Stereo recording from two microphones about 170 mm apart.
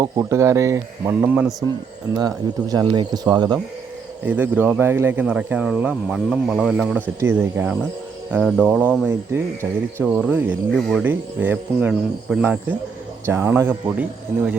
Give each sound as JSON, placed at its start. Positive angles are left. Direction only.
{"t": 0.0, "sound": "speech", "side_deg": -15}
{"t": 2.1, "sound": "speech", "side_deg": -25}
{"t": 4.3, "sound": "speech", "side_deg": -10}
{"t": 10.8, "sound": "speech", "side_deg": 0}
{"t": 11.0, "sound": "speech", "side_deg": -10}